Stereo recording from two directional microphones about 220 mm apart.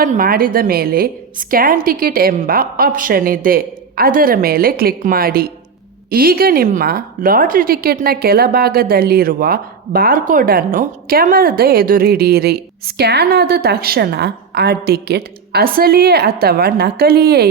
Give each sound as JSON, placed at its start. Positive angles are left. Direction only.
{"t": 0.0, "sound": "a woman's voice", "side_deg": -40}